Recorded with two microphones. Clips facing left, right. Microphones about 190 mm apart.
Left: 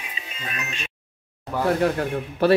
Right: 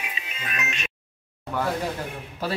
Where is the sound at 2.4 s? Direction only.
65° left (ahead or behind).